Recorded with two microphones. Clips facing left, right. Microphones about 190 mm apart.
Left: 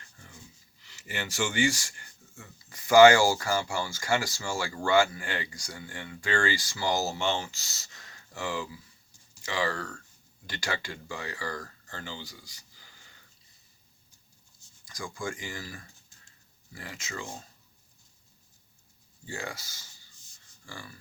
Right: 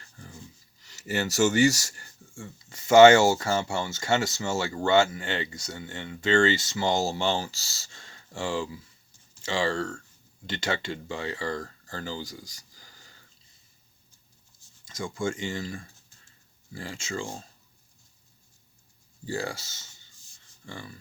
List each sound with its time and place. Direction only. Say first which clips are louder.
0.8 s speech: right 8 dB; 40° right (ahead or behind)
14.8 s speech: right 6 dB; 25° right (ahead or behind)
19.2 s speech: right 6 dB; 35° right (ahead or behind)